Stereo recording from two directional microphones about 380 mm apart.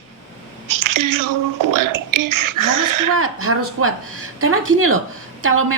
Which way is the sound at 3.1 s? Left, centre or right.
Right.